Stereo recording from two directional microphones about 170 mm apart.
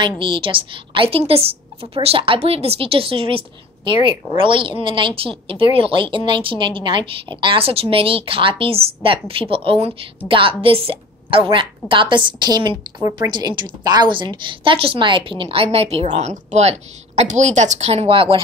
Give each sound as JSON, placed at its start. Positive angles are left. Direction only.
{"t": 0.2, "sound": "a woman's voice", "side_deg": -30}